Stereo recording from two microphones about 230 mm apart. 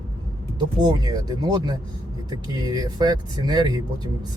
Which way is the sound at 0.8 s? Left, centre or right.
Centre.